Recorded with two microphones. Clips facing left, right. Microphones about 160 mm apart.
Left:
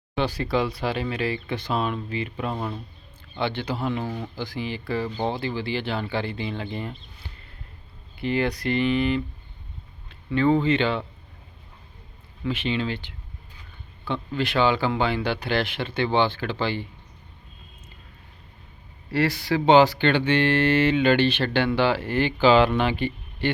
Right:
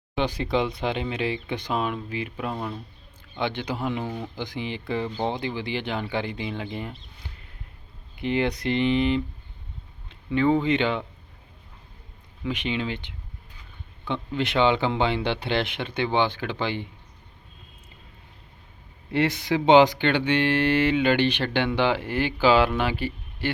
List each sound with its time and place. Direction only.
0.2 s speech: 20° right (ahead or behind); by 2.7 s centre (ahead or behind)
3.3 s speech: 15° right (ahead or behind)
8.1 s speech: 20° right (ahead or behind)
12.5 s speech: 15° right (ahead or behind)
19.1 s speech: 20° right (ahead or behind)